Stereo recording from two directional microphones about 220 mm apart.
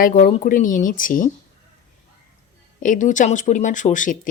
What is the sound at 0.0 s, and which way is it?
Speech, 40° left (ahead or behind).